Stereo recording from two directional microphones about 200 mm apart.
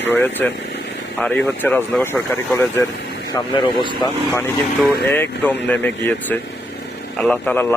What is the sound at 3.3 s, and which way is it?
Speech, 25° left (ahead or behind).